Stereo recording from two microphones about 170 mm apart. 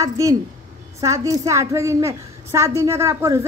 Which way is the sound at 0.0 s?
20° right (ahead or behind).